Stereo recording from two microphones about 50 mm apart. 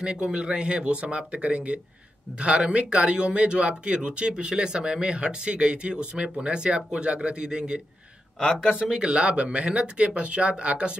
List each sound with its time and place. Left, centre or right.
0.0 s speech: centre
8.8 s speech: centre